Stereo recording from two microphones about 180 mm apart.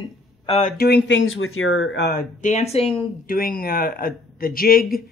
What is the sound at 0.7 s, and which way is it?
Speech, 65° left (ahead or behind).